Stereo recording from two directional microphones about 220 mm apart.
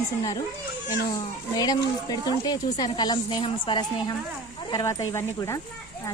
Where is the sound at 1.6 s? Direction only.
15° left (ahead or behind).